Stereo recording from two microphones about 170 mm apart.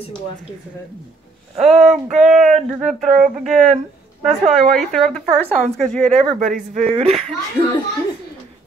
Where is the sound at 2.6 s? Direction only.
Centre (ahead or behind).